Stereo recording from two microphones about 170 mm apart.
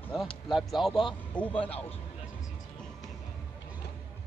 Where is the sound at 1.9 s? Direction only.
40° left (ahead or behind).